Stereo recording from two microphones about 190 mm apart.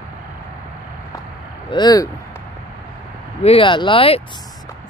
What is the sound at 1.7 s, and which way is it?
Speech, 20° left (ahead or behind).